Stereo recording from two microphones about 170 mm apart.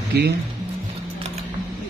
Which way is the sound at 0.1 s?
75° right (ahead or behind).